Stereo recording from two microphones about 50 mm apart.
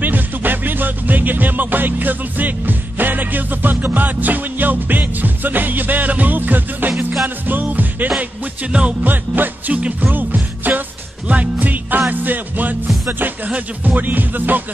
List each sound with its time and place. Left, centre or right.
0.0 s music: right
8.2 s music: right
9.0 s music: right